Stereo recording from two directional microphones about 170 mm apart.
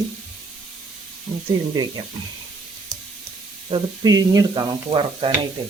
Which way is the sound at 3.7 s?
20° right (ahead or behind).